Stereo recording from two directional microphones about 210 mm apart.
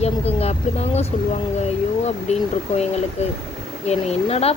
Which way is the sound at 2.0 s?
30° left (ahead or behind).